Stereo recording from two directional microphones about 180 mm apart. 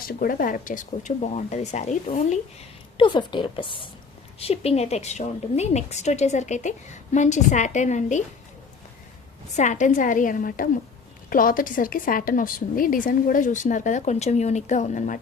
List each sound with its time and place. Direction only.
0.1 s a woman's voice: 55° left (ahead or behind)
3.0 s a woman's voice: 25° left (ahead or behind); by 8.2 s 40° left (ahead or behind)
9.6 s a woman's voice: 40° left (ahead or behind)